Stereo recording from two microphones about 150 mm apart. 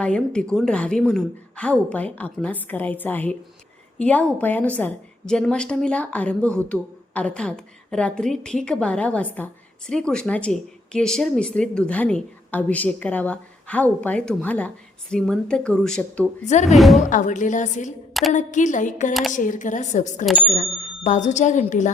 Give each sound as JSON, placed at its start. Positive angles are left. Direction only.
{"t": 0.0, "sound": "a woman's voice", "side_deg": 5}
{"t": 16.5, "sound": "speech", "side_deg": 50}
{"t": 16.7, "sound": "speech", "side_deg": 0}
{"t": 17.1, "sound": "a woman's voice", "side_deg": 60}